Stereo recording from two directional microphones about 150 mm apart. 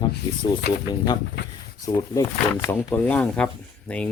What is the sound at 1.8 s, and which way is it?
Speech, 25° left (ahead or behind).